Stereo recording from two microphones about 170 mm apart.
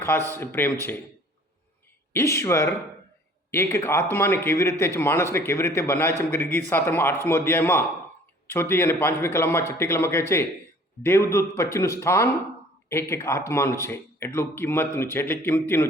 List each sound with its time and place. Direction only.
0.3 s a man's voice: 10° left (ahead or behind)
2.1 s a man's voice: 15° left (ahead or behind)